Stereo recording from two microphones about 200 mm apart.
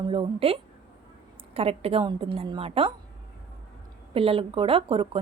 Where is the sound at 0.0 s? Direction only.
25° right (ahead or behind).